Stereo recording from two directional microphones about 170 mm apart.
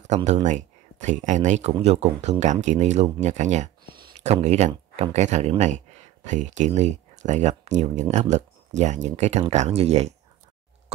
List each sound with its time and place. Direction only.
0.1 s speech: 45° right (ahead or behind)